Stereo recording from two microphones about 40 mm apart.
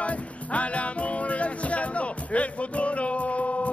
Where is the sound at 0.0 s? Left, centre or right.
Left.